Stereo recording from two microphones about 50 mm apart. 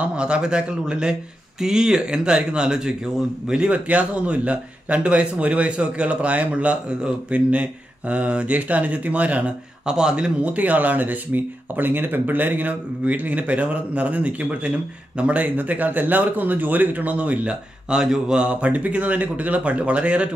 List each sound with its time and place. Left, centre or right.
0.1 s speech: centre
3.6 s a man's voice: right
9.8 s speech: centre
17.8 s speech: centre
18.3 s a man's voice: right